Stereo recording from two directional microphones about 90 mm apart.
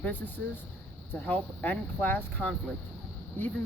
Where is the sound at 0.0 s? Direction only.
20° left (ahead or behind).